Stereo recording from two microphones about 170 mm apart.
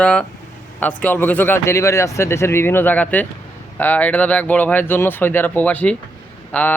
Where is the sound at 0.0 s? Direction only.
5° left (ahead or behind).